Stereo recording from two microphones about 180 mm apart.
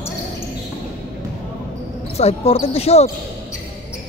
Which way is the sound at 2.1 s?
35° left (ahead or behind).